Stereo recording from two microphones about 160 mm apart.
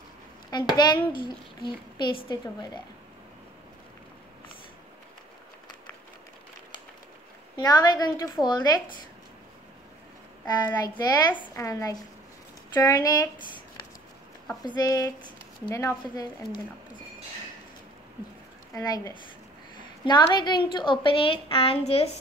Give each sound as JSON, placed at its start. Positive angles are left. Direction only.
{"t": 0.5, "sound": "speech", "side_deg": 25}
{"t": 7.5, "sound": "speech", "side_deg": 25}
{"t": 10.4, "sound": "speech", "side_deg": 25}
{"t": 14.6, "sound": "speech", "side_deg": 25}
{"t": 18.8, "sound": "a woman's voice", "side_deg": 20}